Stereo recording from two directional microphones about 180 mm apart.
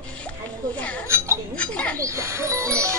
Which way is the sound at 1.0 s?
15° right (ahead or behind).